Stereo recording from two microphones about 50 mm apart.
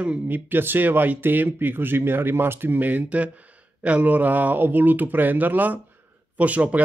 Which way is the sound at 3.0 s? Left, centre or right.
Right.